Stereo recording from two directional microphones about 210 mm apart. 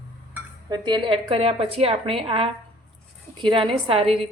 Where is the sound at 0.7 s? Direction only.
20° right (ahead or behind).